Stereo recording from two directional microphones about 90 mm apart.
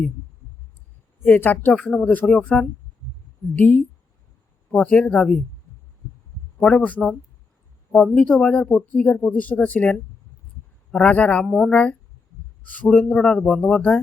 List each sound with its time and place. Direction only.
1.2 s a woman's voice: 20° left (ahead or behind)
6.6 s speech: 10° left (ahead or behind)
8.1 s speech: 15° left (ahead or behind)
10.9 s speech: 15° left (ahead or behind)
11.4 s speech: centre (ahead or behind)
11.7 s speech: 10° left (ahead or behind)